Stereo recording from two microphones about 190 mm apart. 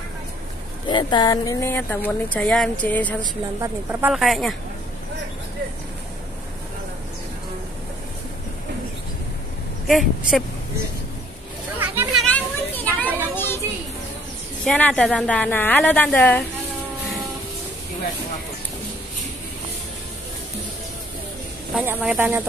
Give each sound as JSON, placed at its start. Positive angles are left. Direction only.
{"t": 0.8, "sound": "a woman's voice", "side_deg": 25}
{"t": 3.6, "sound": "speech", "side_deg": -15}
{"t": 4.1, "sound": "speech", "side_deg": 0}
{"t": 9.8, "sound": "speech", "side_deg": 0}
{"t": 11.8, "sound": "a sound", "side_deg": -10}
{"t": 12.2, "sound": "children playing", "side_deg": 10}
{"t": 14.6, "sound": "a woman's voice", "side_deg": 5}
{"t": 21.7, "sound": "speech", "side_deg": -5}